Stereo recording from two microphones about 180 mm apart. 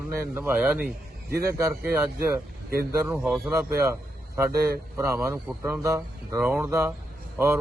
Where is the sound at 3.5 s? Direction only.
15° right (ahead or behind).